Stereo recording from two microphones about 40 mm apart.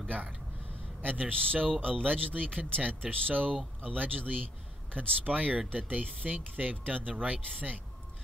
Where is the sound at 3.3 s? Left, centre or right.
Right.